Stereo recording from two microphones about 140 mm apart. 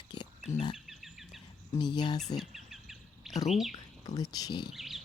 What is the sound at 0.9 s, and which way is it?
Duck, centre (ahead or behind).